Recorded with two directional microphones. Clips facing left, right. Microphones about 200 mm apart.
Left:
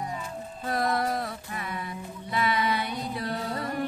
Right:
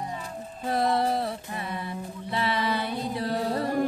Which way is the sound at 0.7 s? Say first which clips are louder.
Right 3 dB; 25° right (ahead or behind).